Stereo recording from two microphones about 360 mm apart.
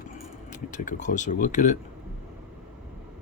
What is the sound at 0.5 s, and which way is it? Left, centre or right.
Speech, left.